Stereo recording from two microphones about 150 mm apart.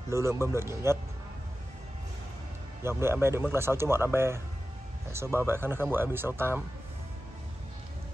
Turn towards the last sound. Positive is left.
turn(degrees=-15)  # may be behind; listen again after turning